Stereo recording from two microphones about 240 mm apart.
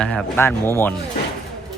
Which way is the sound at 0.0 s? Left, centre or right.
Centre.